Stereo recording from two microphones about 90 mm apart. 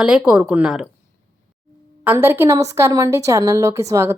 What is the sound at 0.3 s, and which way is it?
Speech, 15° right (ahead or behind).